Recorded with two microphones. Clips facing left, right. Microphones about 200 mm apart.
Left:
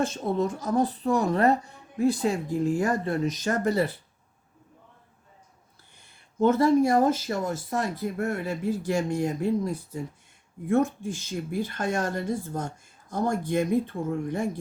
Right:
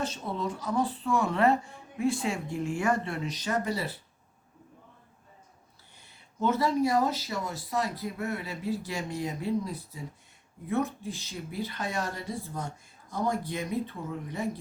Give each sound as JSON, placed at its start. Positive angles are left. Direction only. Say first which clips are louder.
{"t": 0.0, "sound": "a woman's voice", "louder": "left 7 dB", "side_deg": 50}
{"t": 6.0, "sound": "speech", "louder": "left 7 dB", "side_deg": 50}